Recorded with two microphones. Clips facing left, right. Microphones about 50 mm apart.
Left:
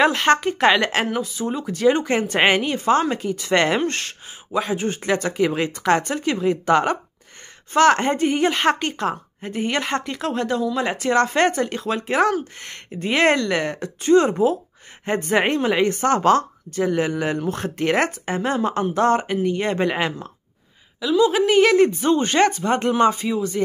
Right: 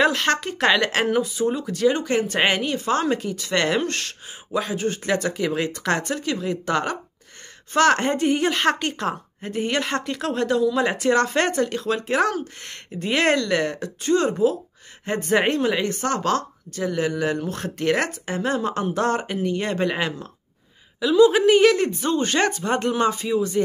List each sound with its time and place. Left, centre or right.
0.0 s a woman's voice: centre
1.0 s a woman's voice: centre
1.6 s a woman's voice: centre
3.3 s a woman's voice: left
7.7 s a woman's voice: centre; by 14.6 s left
15.2 s a woman's voice: centre
21.0 s a woman's voice: centre
21.7 s a woman's voice: centre
22.8 s a woman's voice: centre